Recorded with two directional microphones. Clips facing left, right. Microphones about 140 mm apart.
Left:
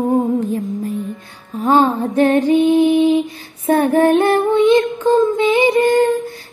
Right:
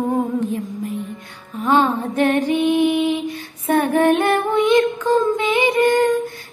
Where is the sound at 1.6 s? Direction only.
35° left (ahead or behind).